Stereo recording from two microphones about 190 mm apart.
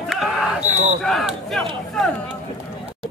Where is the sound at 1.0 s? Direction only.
Centre (ahead or behind).